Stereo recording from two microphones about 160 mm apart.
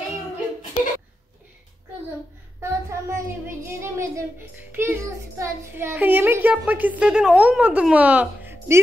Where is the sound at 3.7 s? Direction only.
15° right (ahead or behind).